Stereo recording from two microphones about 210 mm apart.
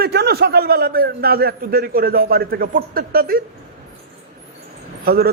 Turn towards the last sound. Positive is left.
turn(degrees=-45)  # may be behind; listen again after turning